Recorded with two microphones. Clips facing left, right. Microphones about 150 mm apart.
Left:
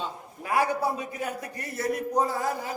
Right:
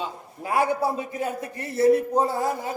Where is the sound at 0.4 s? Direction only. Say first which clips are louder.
Right 3 dB; 25° right (ahead or behind).